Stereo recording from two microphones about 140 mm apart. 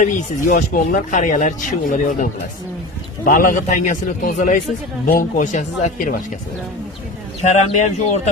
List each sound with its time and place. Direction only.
0.0 s speech: 70° left (ahead or behind)
7.4 s speech: 55° left (ahead or behind)